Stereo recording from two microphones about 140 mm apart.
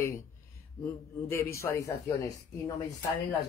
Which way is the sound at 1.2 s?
20° left (ahead or behind).